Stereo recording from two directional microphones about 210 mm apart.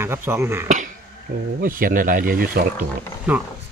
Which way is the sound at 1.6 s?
40° right (ahead or behind).